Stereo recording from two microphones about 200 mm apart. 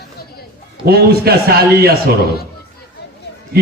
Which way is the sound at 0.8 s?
50° right (ahead or behind).